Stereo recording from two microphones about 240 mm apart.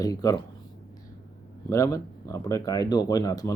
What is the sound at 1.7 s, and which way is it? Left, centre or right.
Speech, centre.